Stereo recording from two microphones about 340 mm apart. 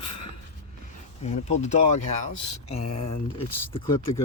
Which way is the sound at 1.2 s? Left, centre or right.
Centre.